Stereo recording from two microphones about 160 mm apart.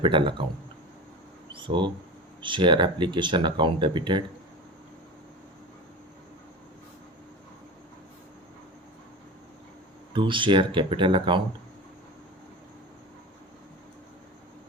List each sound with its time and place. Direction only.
0.0 s speech: 30° right (ahead or behind)
1.5 s speech: 30° right (ahead or behind)
10.1 s speech: 30° right (ahead or behind)